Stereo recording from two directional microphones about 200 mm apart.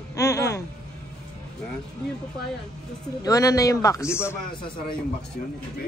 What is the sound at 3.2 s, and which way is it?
A man's voice, 15° left (ahead or behind).